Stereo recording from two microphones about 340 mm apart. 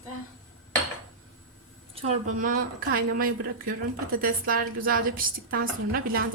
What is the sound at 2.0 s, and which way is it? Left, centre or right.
A woman's voice, right.